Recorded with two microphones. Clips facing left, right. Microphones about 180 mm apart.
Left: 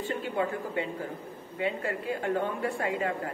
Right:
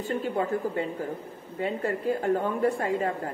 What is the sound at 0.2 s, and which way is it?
A woman's voice, 40° right (ahead or behind).